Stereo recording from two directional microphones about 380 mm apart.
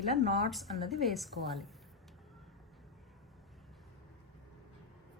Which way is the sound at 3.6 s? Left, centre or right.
Centre.